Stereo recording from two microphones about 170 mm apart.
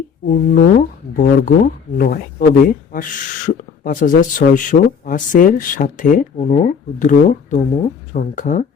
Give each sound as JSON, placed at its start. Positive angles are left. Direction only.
{"t": 0.3, "sound": "speech", "side_deg": 55}